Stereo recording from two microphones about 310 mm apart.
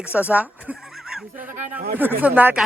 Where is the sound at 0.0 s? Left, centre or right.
Centre.